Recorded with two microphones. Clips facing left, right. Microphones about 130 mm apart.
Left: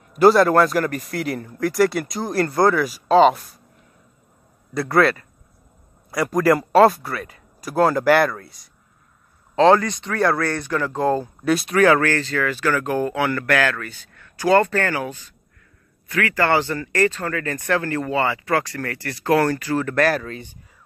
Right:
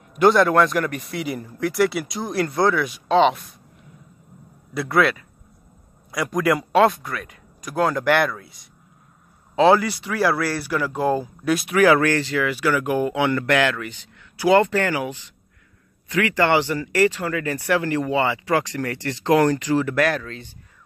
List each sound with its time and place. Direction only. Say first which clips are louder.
0.1 s a man's voice: left 2 dB; centre (ahead or behind)
4.7 s a man's voice: left 2 dB; centre (ahead or behind)
11.5 s a man's voice: left 1 dB; centre (ahead or behind)
11.8 s speech: right 1 dB; 15° right (ahead or behind)
20.0 s speech: left 2 dB; 5° left (ahead or behind)